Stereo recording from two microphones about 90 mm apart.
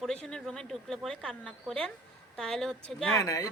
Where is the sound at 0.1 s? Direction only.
10° left (ahead or behind).